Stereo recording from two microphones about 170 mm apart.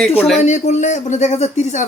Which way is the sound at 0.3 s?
45° left (ahead or behind).